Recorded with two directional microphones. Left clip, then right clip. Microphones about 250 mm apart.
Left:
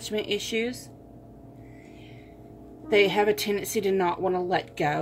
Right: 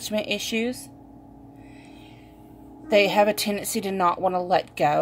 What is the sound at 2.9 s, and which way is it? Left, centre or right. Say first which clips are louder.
Speech: right 3 dB; right.